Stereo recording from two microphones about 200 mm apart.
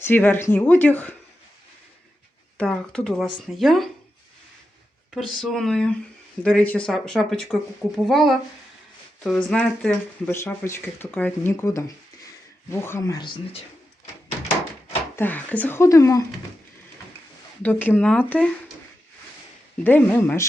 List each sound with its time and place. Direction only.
0.0 s speech: 10° left (ahead or behind)
2.6 s speech: 5° left (ahead or behind)
5.1 s speech: centre (ahead or behind); by 13.6 s 20° left (ahead or behind)
15.1 s speech: 10° left (ahead or behind)
17.6 s speech: 10° left (ahead or behind)
19.8 s speech: 10° left (ahead or behind)